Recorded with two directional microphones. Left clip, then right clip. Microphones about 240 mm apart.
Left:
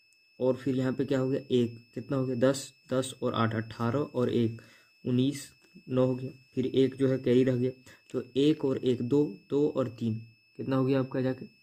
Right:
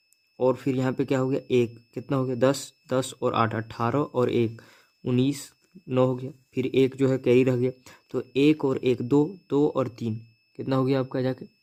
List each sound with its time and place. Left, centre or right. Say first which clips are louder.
0.3 s speech: right 5 dB; right